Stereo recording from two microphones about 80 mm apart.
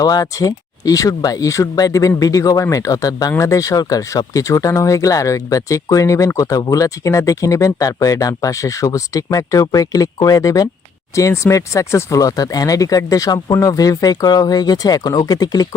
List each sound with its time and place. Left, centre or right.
0.0 s speech: left